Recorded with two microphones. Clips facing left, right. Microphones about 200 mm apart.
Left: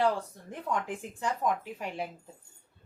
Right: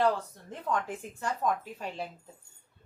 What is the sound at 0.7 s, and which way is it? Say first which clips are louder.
Speech: right 1 dB; 15° left (ahead or behind).